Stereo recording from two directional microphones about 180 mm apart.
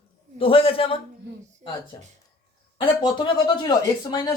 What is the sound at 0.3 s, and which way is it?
Speech, 30° left (ahead or behind).